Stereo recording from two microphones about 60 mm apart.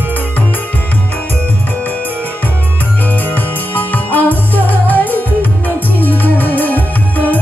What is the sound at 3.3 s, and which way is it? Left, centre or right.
Music, left.